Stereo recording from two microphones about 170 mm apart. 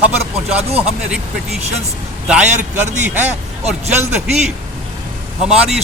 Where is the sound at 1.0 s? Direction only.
5° right (ahead or behind).